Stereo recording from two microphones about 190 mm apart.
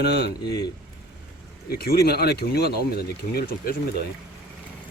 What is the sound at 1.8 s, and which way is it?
Speech, 55° left (ahead or behind).